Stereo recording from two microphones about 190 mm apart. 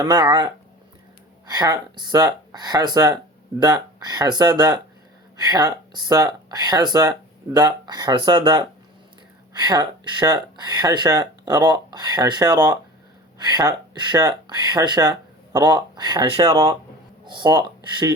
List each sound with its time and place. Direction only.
0.0 s speech: 20° right (ahead or behind)